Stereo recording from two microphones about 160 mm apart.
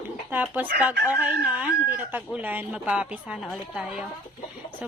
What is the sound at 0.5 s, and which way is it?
A woman's voice, 10° right (ahead or behind).